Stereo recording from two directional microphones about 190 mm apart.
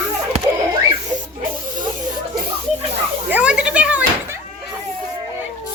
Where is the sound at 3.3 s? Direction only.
5° right (ahead or behind).